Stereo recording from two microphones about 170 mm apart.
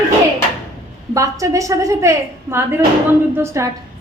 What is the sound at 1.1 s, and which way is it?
A woman's voice, 20° right (ahead or behind).